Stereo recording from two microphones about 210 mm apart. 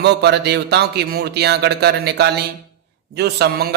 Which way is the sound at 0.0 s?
55° right (ahead or behind).